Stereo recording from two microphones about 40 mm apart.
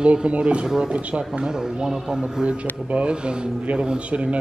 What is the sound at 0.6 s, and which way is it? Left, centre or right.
Speech, centre.